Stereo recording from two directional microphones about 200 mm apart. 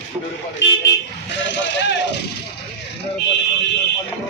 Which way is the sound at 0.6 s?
65° left (ahead or behind).